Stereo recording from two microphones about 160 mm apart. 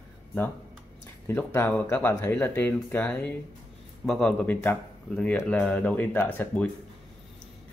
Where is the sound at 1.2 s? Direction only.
15° left (ahead or behind).